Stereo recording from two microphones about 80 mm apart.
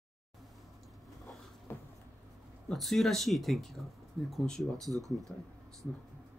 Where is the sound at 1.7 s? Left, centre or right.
Left.